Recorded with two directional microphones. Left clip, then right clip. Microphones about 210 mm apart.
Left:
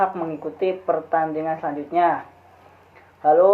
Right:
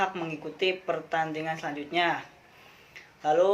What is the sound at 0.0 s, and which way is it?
Speech, 40° right (ahead or behind).